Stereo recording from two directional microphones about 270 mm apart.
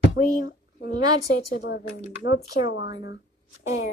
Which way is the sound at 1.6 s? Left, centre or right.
Left.